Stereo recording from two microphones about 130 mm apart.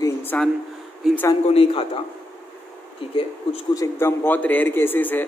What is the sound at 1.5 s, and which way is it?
Speech, 45° left (ahead or behind).